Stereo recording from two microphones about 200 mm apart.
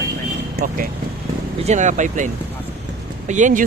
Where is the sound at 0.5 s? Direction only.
45° right (ahead or behind).